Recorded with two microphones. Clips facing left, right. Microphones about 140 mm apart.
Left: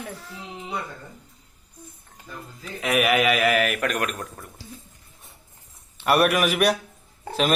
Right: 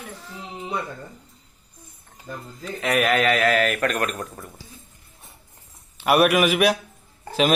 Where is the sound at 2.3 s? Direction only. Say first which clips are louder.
Right 4 dB; 45° right (ahead or behind).